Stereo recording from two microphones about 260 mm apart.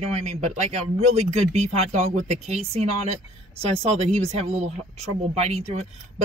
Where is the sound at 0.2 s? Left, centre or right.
Right.